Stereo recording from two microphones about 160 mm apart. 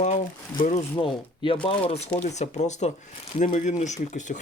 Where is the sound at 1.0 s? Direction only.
30° left (ahead or behind); by 4.3 s 50° left (ahead or behind).